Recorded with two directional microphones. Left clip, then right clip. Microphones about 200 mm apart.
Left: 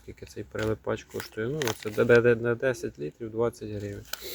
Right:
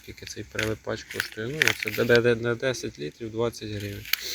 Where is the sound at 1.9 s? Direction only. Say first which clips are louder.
Left 4 dB; 10° left (ahead or behind).